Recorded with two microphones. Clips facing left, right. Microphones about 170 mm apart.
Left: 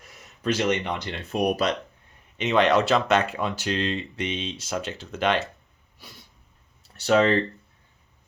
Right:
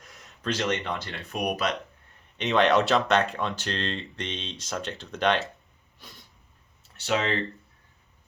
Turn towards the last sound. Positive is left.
turn(degrees=40)  # may be behind; listen again after turning